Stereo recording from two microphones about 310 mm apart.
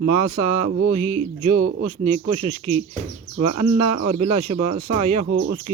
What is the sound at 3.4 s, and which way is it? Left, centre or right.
Speech, right.